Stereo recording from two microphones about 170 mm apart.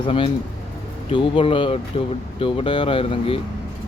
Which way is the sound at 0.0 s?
30° left (ahead or behind).